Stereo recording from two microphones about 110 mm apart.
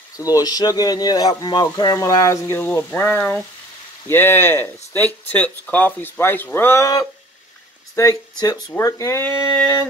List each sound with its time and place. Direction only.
0.2 s speech: 35° left (ahead or behind)
8.7 s speech: 25° left (ahead or behind)
9.2 s a sound: 15° left (ahead or behind)